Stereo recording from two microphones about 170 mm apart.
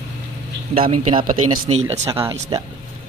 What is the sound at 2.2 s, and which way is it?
Speech, 20° right (ahead or behind).